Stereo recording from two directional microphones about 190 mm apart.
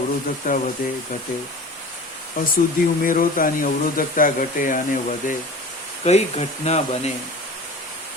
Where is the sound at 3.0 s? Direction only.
45° left (ahead or behind).